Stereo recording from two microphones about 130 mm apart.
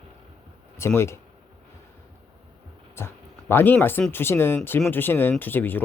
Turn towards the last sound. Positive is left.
turn(degrees=15)  # may be behind; listen again after turning